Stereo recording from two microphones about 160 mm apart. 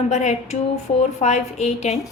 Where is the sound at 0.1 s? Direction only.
45° left (ahead or behind).